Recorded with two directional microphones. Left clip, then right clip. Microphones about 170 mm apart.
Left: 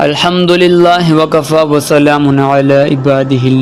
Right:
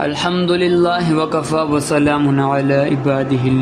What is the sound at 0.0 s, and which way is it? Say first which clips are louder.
A man's voice: left 8 dB; 45° left (ahead or behind).